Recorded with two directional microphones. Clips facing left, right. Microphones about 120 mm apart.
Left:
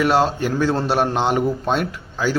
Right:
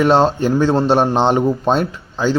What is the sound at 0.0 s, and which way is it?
A man's voice, 30° right (ahead or behind).